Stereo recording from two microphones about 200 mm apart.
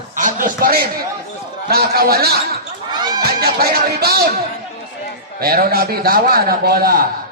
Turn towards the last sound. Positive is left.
turn(degrees=-50)  # may be behind; listen again after turning